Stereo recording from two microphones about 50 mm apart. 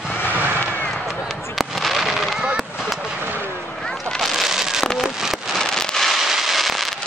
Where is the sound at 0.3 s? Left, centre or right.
Right.